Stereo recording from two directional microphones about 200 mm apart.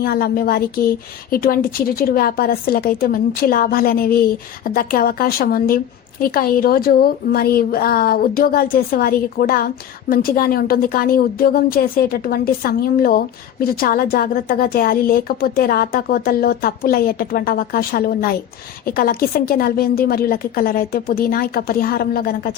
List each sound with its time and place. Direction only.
0.0 s a woman's voice: 50° left (ahead or behind)